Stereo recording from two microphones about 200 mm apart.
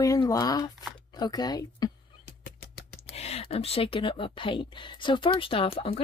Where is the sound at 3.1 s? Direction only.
30° left (ahead or behind).